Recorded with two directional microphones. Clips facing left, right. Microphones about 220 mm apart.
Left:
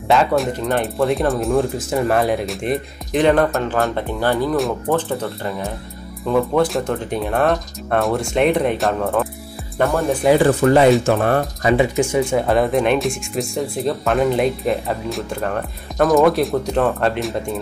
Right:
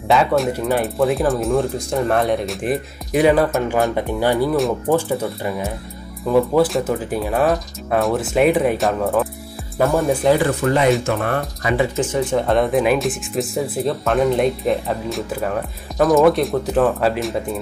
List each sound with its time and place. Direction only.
0.1 s speech: centre (ahead or behind)
10.4 s speech: 35° left (ahead or behind); by 17.4 s centre (ahead or behind)